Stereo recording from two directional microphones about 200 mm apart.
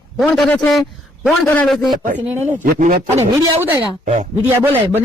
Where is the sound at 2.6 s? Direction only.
40° right (ahead or behind).